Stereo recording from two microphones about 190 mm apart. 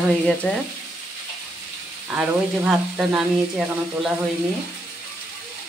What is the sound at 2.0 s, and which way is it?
Speech, 5° right (ahead or behind).